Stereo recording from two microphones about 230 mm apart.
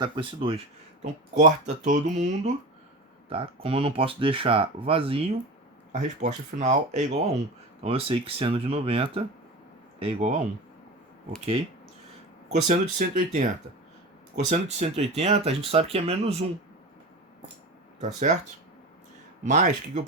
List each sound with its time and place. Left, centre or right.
0.0 s speech: right
12.5 s speech: right
18.0 s speech: right
19.5 s speech: right